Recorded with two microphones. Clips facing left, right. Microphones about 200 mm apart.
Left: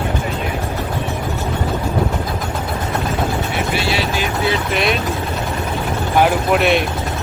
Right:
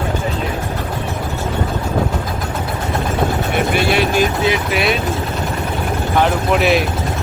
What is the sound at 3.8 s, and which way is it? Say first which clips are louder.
Vehicle: right 5 dB; 55° right (ahead or behind).